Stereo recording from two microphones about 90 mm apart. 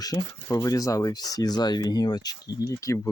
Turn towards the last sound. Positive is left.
turn(degrees=35)  # may be behind; listen again after turning